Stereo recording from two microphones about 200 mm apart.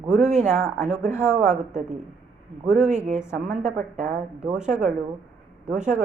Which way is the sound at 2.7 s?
5° right (ahead or behind).